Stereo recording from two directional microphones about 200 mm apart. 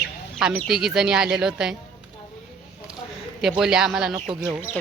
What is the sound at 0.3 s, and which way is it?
Speech, 5° right (ahead or behind).